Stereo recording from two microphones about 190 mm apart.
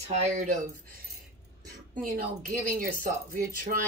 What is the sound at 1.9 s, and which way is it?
Speech, 45° right (ahead or behind).